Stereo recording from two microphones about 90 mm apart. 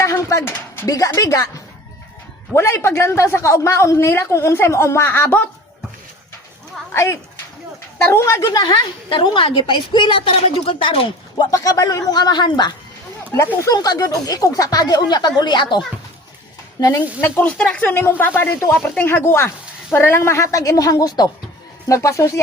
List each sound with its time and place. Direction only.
0.0 s speech: 35° left (ahead or behind)
0.9 s a woman's voice: 40° left (ahead or behind)
2.5 s speech: 30° left (ahead or behind)
6.9 s a woman's voice: 30° left (ahead or behind)
8.3 s a woman's voice: 40° left (ahead or behind)
8.6 s a woman's voice: 60° left (ahead or behind); by 11.0 s 75° left (ahead or behind)
11.3 s speech: 45° left (ahead or behind)
16.8 s speech: 50° left (ahead or behind)
17.2 s a woman's voice: 20° left (ahead or behind); by 21.2 s 45° left (ahead or behind)
21.8 s a woman's voice: 35° left (ahead or behind)